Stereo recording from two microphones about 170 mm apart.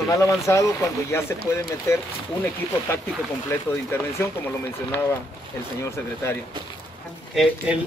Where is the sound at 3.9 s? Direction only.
15° left (ahead or behind).